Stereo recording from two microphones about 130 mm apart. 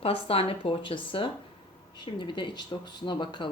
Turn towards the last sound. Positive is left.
turn(degrees=40)  # may be behind; listen again after turning